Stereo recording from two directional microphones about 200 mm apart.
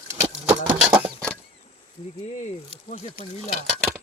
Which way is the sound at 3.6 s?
Centre (ahead or behind).